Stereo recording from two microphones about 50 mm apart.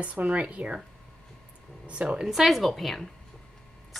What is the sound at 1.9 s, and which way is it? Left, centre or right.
Speech, centre.